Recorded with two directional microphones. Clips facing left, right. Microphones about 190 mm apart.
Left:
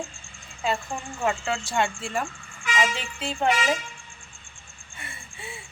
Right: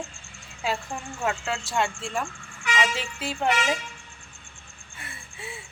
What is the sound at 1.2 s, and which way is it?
A woman's voice, centre (ahead or behind).